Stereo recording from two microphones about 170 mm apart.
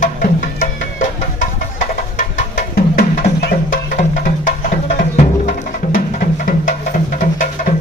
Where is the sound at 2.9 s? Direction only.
65° left (ahead or behind).